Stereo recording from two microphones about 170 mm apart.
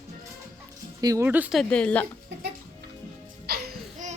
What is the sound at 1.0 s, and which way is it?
Speech, 20° right (ahead or behind).